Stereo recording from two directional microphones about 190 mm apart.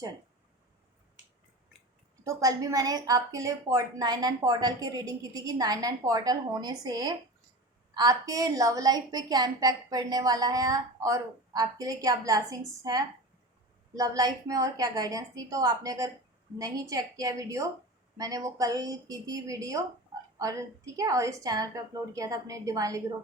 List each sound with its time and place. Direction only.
2.2 s a woman's voice: 20° right (ahead or behind)